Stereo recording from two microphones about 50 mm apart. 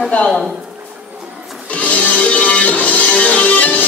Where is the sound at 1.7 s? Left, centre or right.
Left.